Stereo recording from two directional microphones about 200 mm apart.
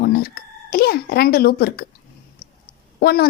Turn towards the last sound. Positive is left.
turn(degrees=50)  # may be behind; listen again after turning